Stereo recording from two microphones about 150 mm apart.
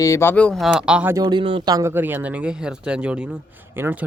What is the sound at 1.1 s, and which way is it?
Speech, 25° right (ahead or behind).